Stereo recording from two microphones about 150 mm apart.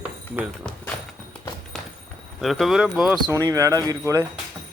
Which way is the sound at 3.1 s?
25° right (ahead or behind).